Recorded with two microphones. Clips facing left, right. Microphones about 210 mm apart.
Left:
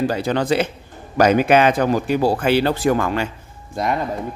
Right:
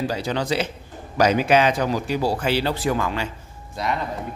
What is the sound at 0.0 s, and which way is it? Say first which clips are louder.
Speech: left 5 dB; 55° left (ahead or behind).